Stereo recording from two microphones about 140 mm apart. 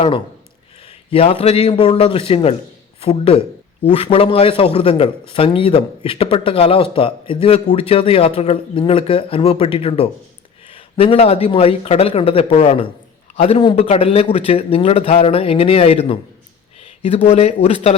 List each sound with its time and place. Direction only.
1.1 s a man's voice: 45° left (ahead or behind)